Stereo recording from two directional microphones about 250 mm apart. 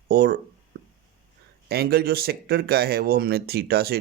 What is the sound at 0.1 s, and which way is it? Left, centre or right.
Speech, right.